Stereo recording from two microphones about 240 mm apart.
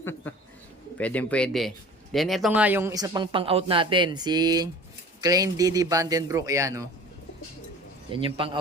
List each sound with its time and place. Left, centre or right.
0.0 s speech: centre
8.1 s a man's voice: right